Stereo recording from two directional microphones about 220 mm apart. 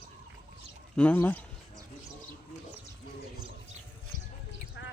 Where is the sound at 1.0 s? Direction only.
5° left (ahead or behind).